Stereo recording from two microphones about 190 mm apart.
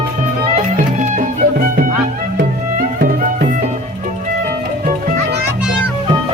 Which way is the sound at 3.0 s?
45° right (ahead or behind).